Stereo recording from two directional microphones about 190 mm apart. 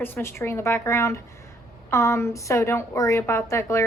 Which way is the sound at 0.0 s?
10° left (ahead or behind).